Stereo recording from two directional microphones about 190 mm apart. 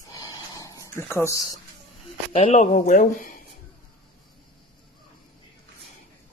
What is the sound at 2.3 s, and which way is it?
Speech, 30° left (ahead or behind).